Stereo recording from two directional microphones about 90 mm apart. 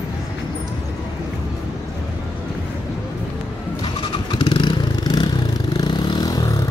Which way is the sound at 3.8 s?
65° left (ahead or behind).